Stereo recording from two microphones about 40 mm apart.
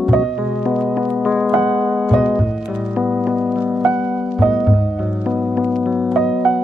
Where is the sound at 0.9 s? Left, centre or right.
Right; by 2.4 s centre.